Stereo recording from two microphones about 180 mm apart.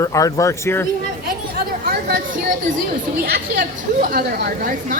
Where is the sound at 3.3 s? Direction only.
60° right (ahead or behind).